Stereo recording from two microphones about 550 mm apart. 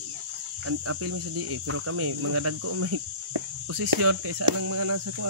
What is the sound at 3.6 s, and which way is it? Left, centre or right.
Cricket, right.